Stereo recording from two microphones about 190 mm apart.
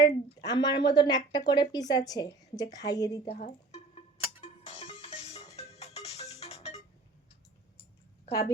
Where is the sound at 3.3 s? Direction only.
30° left (ahead or behind).